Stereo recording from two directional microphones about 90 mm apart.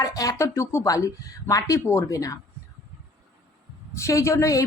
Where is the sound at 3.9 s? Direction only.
35° left (ahead or behind).